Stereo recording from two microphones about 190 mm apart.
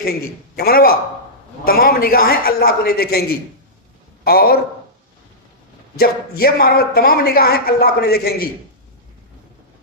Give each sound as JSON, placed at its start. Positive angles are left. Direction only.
{"t": 0.0, "sound": "speech", "side_deg": 55}
{"t": 6.0, "sound": "speech", "side_deg": 55}